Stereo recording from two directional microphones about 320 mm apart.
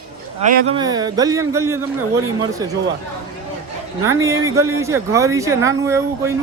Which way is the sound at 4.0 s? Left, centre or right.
Centre.